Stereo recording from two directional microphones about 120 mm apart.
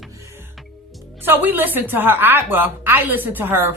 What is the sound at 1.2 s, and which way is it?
Speech, 15° right (ahead or behind).